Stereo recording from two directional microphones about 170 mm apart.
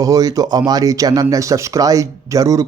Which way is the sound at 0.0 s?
20° right (ahead or behind).